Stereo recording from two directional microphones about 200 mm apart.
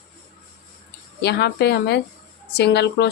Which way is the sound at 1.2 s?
55° left (ahead or behind).